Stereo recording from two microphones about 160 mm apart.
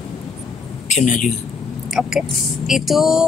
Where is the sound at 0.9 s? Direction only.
50° left (ahead or behind).